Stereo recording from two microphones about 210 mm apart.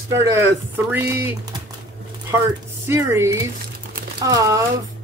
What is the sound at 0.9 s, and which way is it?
Speech, 10° right (ahead or behind).